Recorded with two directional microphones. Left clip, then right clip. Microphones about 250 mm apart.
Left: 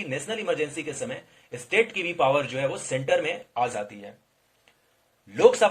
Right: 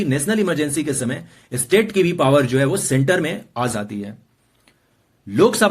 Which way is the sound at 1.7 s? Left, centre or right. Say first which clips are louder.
Right 7 dB; right.